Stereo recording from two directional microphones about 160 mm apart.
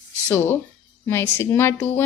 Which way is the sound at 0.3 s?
15° left (ahead or behind).